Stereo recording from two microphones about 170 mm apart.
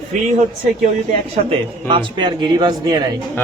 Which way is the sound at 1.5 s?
30° right (ahead or behind).